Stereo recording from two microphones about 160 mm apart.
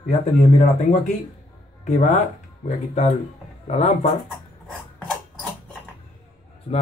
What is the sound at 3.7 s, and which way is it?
Speech, 40° left (ahead or behind).